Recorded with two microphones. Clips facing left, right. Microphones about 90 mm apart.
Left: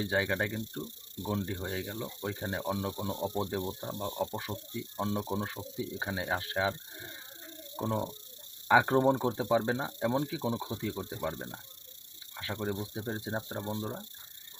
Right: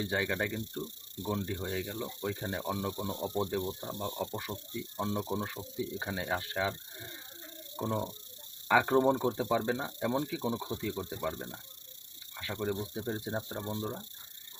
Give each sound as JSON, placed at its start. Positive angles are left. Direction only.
{"t": 0.0, "sound": "speech", "side_deg": 15}
{"t": 7.8, "sound": "speech", "side_deg": 10}